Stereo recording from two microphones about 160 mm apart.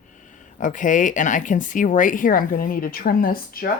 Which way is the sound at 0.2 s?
55° left (ahead or behind).